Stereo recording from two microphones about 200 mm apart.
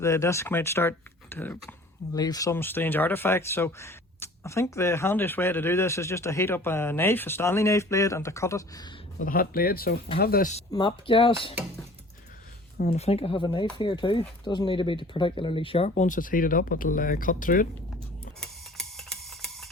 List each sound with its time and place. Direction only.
0.0 s speech: 15° left (ahead or behind)
9.1 s speech: 45° left (ahead or behind)
10.7 s speech: 20° left (ahead or behind)
12.8 s speech: 30° left (ahead or behind)
18.3 s a sound: centre (ahead or behind)